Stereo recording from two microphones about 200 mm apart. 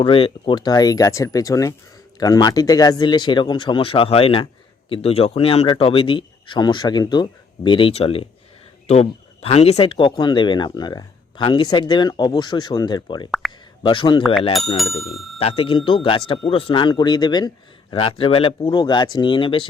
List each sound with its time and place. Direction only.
0.0 s speech: 25° left (ahead or behind)
14.8 s speech: centre (ahead or behind)
15.4 s speech: 30° left (ahead or behind)